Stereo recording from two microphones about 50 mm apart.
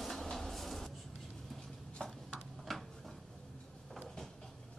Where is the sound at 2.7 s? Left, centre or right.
Centre.